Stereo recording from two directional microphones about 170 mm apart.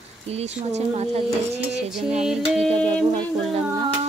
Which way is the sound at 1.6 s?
5° right (ahead or behind).